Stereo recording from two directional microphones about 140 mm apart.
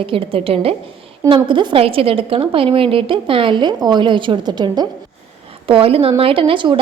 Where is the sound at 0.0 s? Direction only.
40° right (ahead or behind).